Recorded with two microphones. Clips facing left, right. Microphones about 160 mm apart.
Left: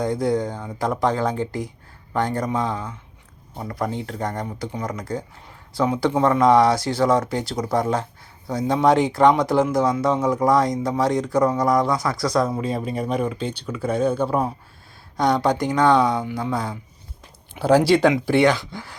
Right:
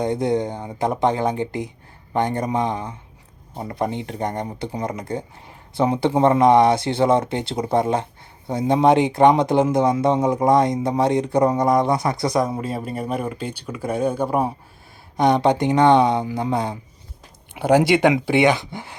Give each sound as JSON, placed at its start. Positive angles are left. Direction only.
{"t": 0.0, "sound": "speech", "side_deg": -20}